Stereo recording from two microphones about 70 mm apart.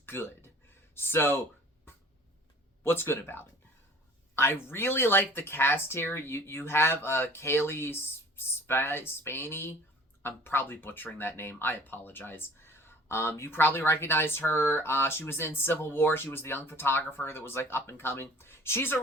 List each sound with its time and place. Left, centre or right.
0.0 s a sound: left
0.9 s speech: left
2.8 s speech: left